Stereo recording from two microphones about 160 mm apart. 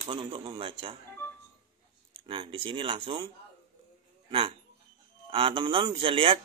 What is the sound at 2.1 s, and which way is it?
Speech, 30° right (ahead or behind).